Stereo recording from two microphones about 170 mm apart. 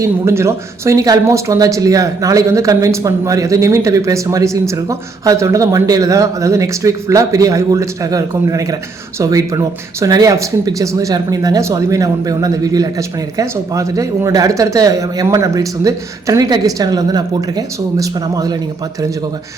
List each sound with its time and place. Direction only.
0.0 s speech: 15° right (ahead or behind)